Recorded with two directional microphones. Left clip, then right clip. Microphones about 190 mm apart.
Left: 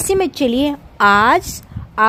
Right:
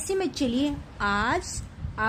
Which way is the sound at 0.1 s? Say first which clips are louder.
Left 11 dB; 50° left (ahead or behind).